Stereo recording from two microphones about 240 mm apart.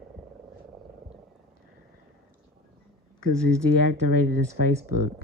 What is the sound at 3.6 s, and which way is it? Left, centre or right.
Speech, left.